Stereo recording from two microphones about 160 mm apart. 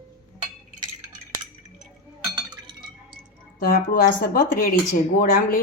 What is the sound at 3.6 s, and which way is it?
Speech, 60° left (ahead or behind).